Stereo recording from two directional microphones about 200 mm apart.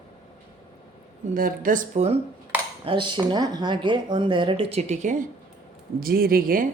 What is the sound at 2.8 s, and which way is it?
Speech, 25° right (ahead or behind).